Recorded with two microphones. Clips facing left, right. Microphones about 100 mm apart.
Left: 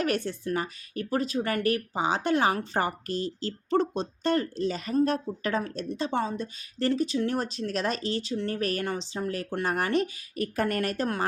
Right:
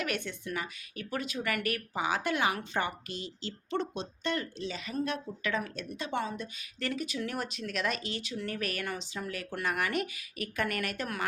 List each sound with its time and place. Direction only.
0.0 s speech: 35° left (ahead or behind)